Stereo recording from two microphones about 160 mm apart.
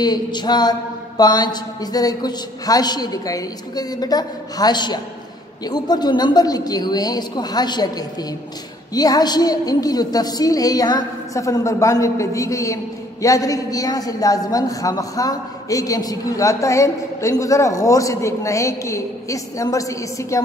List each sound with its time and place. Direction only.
0.0 s a woman's voice: 25° left (ahead or behind)